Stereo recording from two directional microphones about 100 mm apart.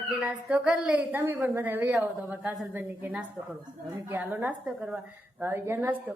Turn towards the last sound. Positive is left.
turn(degrees=-25)  # may be behind; listen again after turning